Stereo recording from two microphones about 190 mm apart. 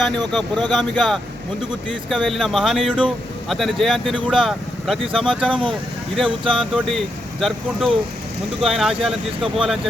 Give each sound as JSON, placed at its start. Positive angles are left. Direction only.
{"t": 0.3, "sound": "speech", "side_deg": 0}
{"t": 6.2, "sound": "speech", "side_deg": -25}
{"t": 6.7, "sound": "speech", "side_deg": 0}